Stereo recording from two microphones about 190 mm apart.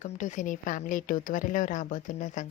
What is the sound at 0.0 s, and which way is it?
Speech, 40° left (ahead or behind).